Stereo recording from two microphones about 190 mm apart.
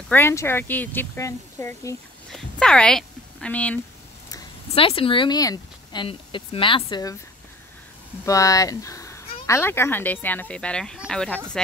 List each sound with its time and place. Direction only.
0.1 s speech: 15° left (ahead or behind)
2.3 s speech: 5° left (ahead or behind)
4.7 s speech: 30° left (ahead or behind)
8.3 s speech: 15° left (ahead or behind)